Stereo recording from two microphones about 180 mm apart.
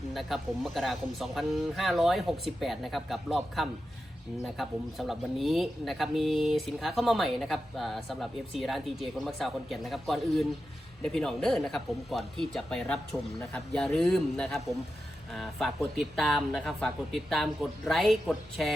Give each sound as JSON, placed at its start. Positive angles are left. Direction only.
{"t": 0.1, "sound": "speech", "side_deg": 0}